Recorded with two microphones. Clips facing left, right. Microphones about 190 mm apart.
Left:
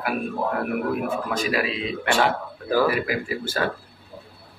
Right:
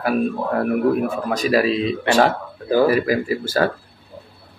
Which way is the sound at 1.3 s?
40° right (ahead or behind).